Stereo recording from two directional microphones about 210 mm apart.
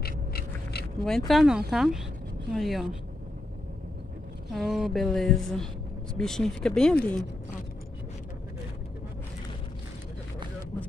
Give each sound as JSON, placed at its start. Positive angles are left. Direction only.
{"t": 0.0, "sound": "a sound", "side_deg": 45}
{"t": 1.0, "sound": "a woman's voice", "side_deg": 0}
{"t": 4.5, "sound": "a woman's voice", "side_deg": 0}